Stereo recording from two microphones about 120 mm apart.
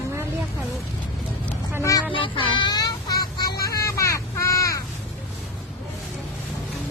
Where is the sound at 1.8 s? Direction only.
30° left (ahead or behind).